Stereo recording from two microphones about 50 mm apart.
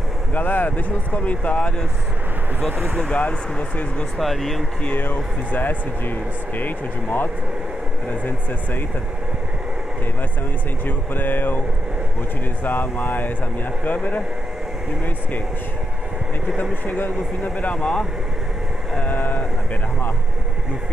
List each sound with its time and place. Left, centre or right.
0.3 s speech: left
3.2 s speech: left
4.2 s speech: centre
4.8 s speech: left
10.9 s speech: left
12.6 s speech: left
17.0 s speech: left
19.0 s vehicle: left